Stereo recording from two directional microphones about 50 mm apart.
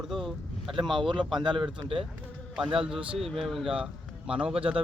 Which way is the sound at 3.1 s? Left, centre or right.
Centre.